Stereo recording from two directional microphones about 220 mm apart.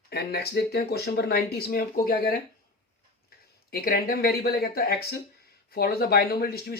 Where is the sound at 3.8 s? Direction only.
45° left (ahead or behind).